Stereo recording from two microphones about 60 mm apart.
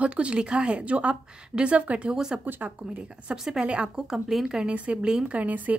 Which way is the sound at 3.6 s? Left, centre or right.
Centre.